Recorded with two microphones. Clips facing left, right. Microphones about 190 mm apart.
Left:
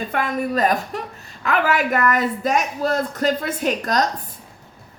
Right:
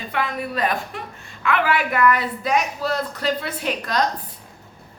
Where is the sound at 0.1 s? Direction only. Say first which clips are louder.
Left 1 dB; 45° left (ahead or behind).